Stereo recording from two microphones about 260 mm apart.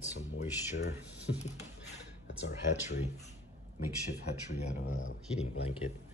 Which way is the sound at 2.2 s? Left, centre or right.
Left.